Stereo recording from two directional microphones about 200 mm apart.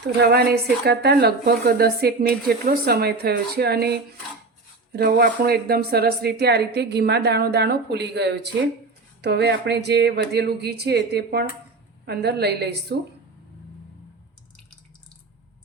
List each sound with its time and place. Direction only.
0.2 s speech: 50° right (ahead or behind)